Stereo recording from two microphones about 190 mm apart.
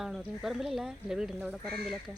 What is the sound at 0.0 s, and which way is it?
Speech, centre (ahead or behind).